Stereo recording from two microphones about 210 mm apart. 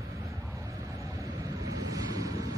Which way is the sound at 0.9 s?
15° right (ahead or behind).